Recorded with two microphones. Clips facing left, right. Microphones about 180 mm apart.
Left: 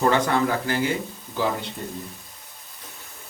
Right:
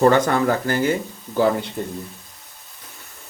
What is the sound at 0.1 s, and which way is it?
Speech, 50° right (ahead or behind).